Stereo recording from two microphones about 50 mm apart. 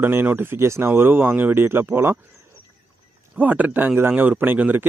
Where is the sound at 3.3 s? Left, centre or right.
Right.